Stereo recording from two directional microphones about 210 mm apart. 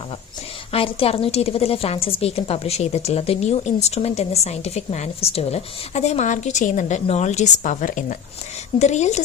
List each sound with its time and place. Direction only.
0.7 s a woman's voice: 25° left (ahead or behind)